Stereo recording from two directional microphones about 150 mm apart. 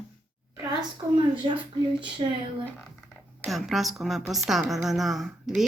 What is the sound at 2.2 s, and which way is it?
Speech, 35° right (ahead or behind).